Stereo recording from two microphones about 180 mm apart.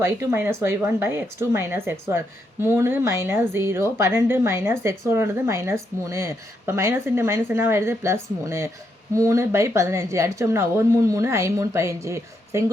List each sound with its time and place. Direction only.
0.0 s speech: 15° right (ahead or behind)